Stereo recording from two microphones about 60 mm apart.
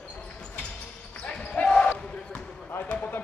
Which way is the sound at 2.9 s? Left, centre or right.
Left.